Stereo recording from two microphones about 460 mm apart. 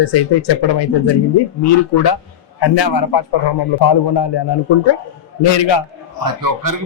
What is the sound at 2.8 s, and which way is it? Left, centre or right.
A man's voice, left.